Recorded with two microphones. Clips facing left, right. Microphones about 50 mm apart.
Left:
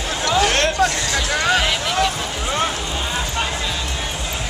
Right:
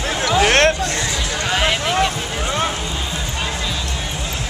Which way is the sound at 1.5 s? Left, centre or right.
Centre.